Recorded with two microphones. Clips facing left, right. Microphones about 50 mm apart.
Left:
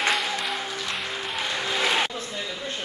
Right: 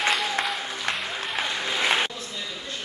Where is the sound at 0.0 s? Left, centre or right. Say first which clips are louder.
Even; centre.